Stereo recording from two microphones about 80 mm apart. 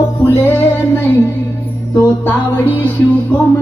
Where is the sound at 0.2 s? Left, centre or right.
Left.